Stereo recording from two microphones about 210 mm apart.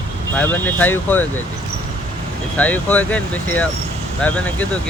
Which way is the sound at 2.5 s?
5° left (ahead or behind).